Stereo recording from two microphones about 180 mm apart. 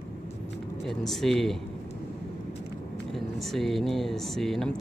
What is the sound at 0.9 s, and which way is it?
Speech, centre (ahead or behind).